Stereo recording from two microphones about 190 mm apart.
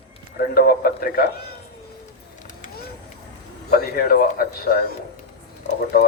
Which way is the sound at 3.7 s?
55° left (ahead or behind).